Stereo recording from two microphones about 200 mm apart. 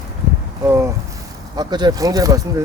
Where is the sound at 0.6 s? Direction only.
15° right (ahead or behind).